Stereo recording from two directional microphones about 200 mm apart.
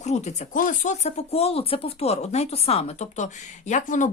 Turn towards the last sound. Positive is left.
turn(degrees=40)  # may be behind; listen again after turning